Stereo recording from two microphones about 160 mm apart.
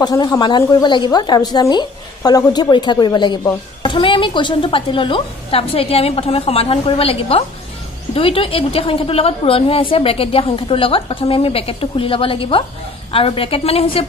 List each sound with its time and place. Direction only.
0.0 s a woman's voice: 25° left (ahead or behind)